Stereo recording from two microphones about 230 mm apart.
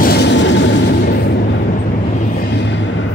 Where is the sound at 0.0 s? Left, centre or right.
Left.